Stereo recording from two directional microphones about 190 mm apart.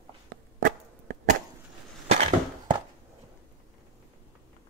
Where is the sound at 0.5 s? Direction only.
45° right (ahead or behind).